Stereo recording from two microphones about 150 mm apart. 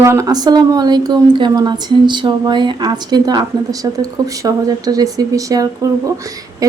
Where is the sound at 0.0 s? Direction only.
20° right (ahead or behind).